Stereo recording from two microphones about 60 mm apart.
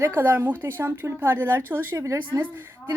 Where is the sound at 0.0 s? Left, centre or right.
Right.